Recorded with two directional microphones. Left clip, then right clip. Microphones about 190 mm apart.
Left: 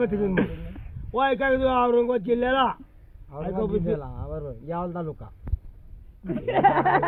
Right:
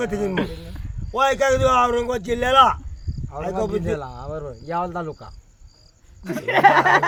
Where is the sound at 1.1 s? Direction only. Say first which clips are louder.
Right 4 dB; 40° right (ahead or behind).